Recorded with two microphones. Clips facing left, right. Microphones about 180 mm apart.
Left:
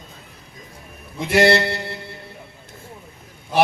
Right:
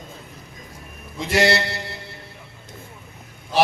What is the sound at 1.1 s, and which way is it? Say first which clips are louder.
Speech: left 4 dB; 55° left (ahead or behind).